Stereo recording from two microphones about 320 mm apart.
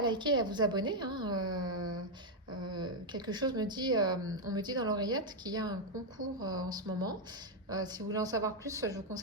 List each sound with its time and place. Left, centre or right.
0.0 s a woman's voice: centre
1.7 s a sound: right
2.6 s a woman's voice: centre